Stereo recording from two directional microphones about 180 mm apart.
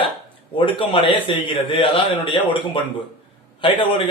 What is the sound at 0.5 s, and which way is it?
A man's voice, 30° left (ahead or behind).